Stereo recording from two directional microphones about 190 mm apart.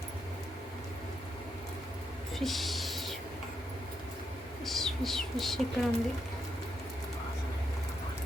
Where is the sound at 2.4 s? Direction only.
Centre (ahead or behind).